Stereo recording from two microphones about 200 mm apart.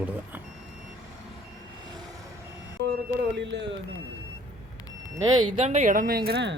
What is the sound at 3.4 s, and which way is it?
Speech, 60° right (ahead or behind).